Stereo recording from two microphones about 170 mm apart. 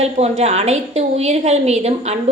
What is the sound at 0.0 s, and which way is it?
A woman's voice, 40° right (ahead or behind).